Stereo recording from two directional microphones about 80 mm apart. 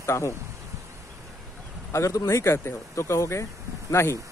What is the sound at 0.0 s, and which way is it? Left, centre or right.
Speech, left.